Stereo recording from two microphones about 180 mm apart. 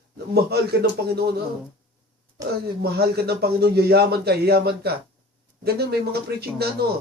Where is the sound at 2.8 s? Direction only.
65° right (ahead or behind).